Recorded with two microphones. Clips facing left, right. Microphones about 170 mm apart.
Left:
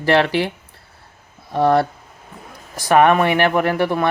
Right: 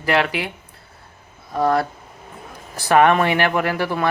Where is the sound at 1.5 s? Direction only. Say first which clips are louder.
Left 3 dB; 30° left (ahead or behind).